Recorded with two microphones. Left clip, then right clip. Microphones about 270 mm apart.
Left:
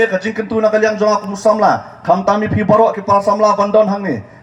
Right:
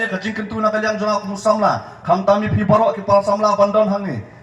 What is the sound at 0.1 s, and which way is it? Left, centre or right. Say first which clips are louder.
A man's voice: left 7 dB; left.